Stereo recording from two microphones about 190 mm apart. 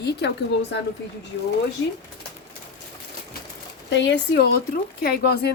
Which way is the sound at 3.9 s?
65° left (ahead or behind).